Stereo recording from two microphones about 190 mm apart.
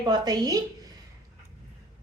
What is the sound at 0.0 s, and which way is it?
Speech, 20° right (ahead or behind).